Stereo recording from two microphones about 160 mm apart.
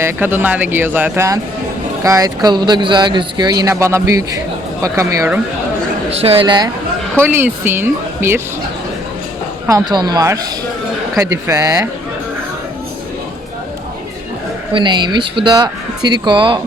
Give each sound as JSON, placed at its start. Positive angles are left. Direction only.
{"t": 0.0, "sound": "speech", "side_deg": -10}
{"t": 6.1, "sound": "speech", "side_deg": -35}
{"t": 7.2, "sound": "speech", "side_deg": -15}
{"t": 9.6, "sound": "speech", "side_deg": -25}
{"t": 14.7, "sound": "speech", "side_deg": -30}